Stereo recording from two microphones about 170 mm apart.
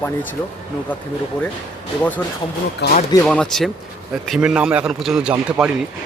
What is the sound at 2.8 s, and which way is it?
Speech, 75° left (ahead or behind).